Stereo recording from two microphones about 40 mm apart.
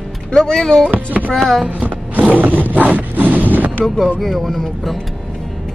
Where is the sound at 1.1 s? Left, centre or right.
Right.